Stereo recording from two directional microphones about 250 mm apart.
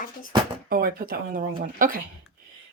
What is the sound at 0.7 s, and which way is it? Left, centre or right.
Speech, right.